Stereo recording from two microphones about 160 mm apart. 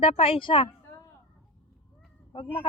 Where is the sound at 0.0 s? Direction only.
35° left (ahead or behind).